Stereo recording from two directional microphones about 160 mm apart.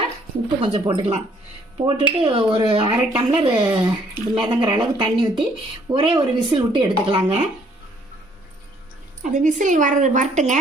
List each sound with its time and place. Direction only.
0.6 s speech: 40° right (ahead or behind)
9.2 s a woman's voice: 50° right (ahead or behind)